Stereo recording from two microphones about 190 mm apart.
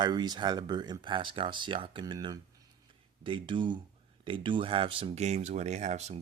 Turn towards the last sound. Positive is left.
turn(degrees=-35)  # may be behind; listen again after turning